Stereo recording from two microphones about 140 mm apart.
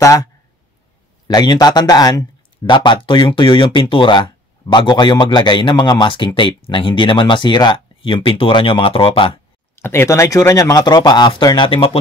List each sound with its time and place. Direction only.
0.0 s speech: 25° left (ahead or behind); by 9.4 s 40° left (ahead or behind)
9.8 s speech: 15° left (ahead or behind); by 12.0 s 40° left (ahead or behind)